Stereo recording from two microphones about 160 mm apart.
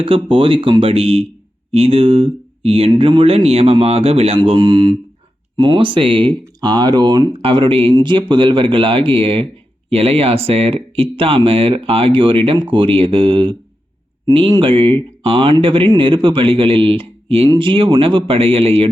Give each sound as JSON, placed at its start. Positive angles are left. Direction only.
{"t": 0.0, "sound": "speech", "side_deg": -35}